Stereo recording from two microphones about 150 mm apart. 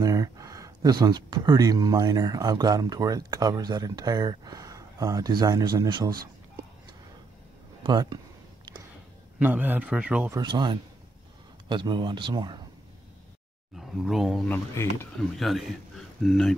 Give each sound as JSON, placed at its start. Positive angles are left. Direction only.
{"t": 0.0, "sound": "speech", "side_deg": -25}
{"t": 7.8, "sound": "speech", "side_deg": -30}
{"t": 9.4, "sound": "a man's voice", "side_deg": -10}
{"t": 10.3, "sound": "speech", "side_deg": -30}
{"t": 13.7, "sound": "speech", "side_deg": 0}
{"t": 14.5, "sound": "speech", "side_deg": 15}
{"t": 15.3, "sound": "speech", "side_deg": 0}